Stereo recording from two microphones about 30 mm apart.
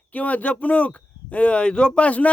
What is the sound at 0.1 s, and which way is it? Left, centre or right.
Speech, left.